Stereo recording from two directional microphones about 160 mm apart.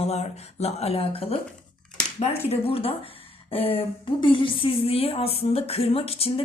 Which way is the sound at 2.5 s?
35° left (ahead or behind).